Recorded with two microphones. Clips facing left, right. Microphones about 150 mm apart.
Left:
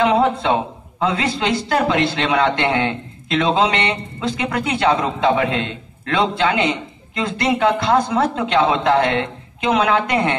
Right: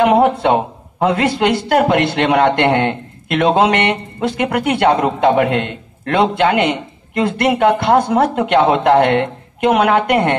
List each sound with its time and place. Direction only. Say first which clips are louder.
0.0 s a man's voice: right 4 dB; 55° right (ahead or behind)